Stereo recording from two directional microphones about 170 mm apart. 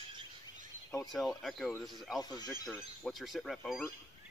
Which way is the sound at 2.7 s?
Centre (ahead or behind).